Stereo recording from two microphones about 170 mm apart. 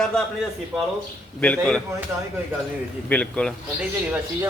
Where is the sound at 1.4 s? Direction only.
5° left (ahead or behind).